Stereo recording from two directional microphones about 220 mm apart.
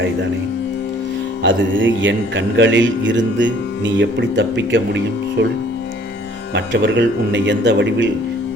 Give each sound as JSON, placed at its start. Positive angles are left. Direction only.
{"t": 1.5, "sound": "a man's voice", "side_deg": -60}
{"t": 6.5, "sound": "a man's voice", "side_deg": -55}